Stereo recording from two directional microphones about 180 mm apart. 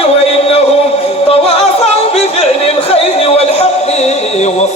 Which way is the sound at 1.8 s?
35° left (ahead or behind).